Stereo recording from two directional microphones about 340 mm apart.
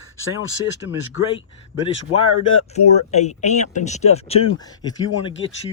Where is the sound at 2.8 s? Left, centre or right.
Centre.